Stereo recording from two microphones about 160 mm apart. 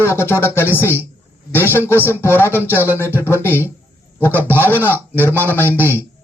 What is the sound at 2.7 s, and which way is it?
Speech, 10° right (ahead or behind).